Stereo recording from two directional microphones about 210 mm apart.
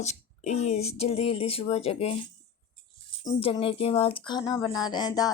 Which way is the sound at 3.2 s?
20° left (ahead or behind).